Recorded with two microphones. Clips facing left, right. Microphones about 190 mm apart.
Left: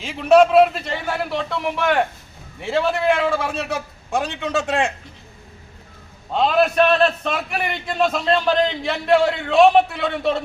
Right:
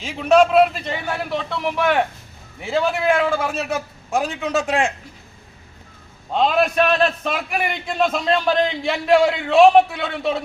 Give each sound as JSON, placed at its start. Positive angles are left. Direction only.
{"t": 0.0, "sound": "a man's voice", "side_deg": 0}
{"t": 2.6, "sound": "a man's voice", "side_deg": 0}
{"t": 6.3, "sound": "a man's voice", "side_deg": 0}